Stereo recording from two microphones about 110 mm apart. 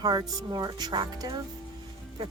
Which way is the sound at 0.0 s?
40° right (ahead or behind).